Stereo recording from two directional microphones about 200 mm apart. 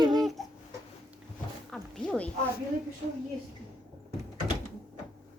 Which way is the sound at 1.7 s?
5° left (ahead or behind).